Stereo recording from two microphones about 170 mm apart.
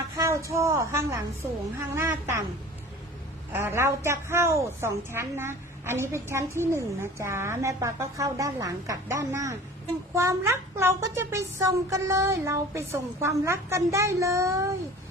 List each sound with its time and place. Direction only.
0.2 s a woman's voice: 20° right (ahead or behind)
3.5 s a woman's voice: 15° right (ahead or behind)